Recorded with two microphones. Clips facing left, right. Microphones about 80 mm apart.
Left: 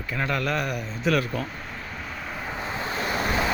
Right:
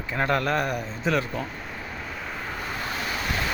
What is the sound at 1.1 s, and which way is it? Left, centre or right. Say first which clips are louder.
Speech: left 1 dB; right.